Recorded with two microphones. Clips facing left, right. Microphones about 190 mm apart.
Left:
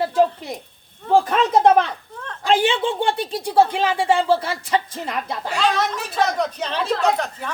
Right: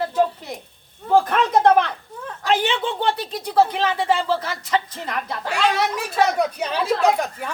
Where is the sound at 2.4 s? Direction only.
30° left (ahead or behind).